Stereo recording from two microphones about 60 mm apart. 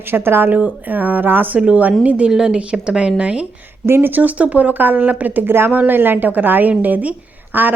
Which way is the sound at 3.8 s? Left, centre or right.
Right.